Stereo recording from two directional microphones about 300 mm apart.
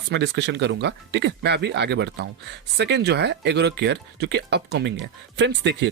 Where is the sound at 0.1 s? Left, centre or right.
Right.